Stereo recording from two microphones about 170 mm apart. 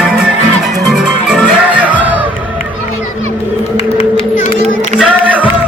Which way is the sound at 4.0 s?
35° left (ahead or behind).